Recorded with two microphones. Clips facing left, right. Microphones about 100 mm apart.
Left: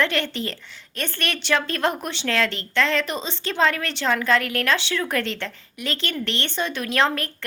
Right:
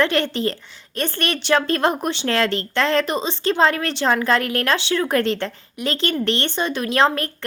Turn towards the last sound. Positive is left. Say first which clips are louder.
# right 4 dB
turn(degrees=-30)  # may be behind; listen again after turning